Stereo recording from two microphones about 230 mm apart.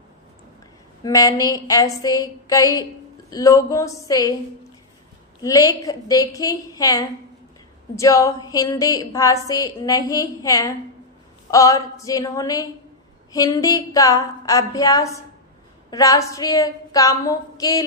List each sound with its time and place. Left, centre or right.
1.0 s a woman's voice: centre
5.4 s a woman's voice: centre